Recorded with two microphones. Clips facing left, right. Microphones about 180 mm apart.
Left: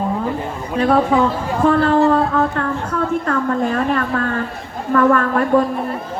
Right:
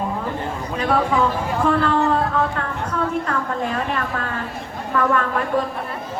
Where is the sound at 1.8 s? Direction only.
40° left (ahead or behind).